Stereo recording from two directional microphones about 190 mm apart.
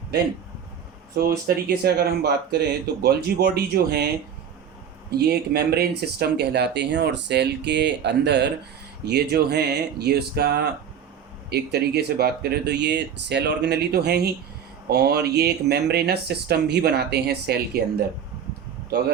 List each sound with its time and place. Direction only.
1.1 s speech: 55° right (ahead or behind)
5.1 s speech: 55° right (ahead or behind)